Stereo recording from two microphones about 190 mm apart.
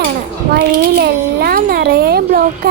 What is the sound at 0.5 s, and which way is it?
A child's voice, 55° right (ahead or behind).